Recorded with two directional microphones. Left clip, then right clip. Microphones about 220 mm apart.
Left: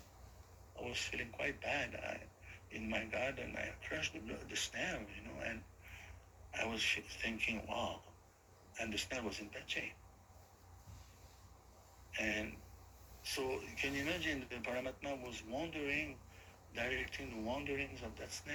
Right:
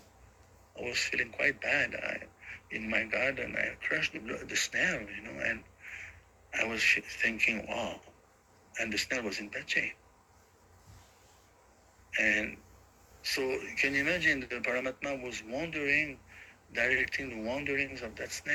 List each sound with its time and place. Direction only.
0.8 s speech: 35° right (ahead or behind)
12.1 s speech: 35° right (ahead or behind)